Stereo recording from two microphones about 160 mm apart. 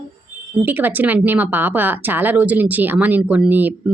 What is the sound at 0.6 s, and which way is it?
Speech, 10° right (ahead or behind).